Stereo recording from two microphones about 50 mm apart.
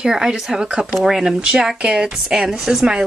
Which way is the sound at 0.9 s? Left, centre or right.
Centre.